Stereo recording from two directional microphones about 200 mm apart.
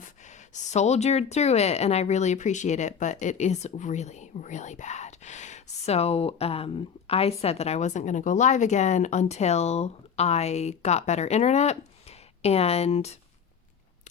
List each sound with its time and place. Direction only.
0.0 s speech: 35° left (ahead or behind)